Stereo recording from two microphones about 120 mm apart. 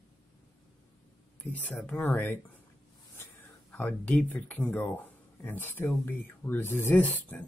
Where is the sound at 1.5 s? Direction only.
15° left (ahead or behind).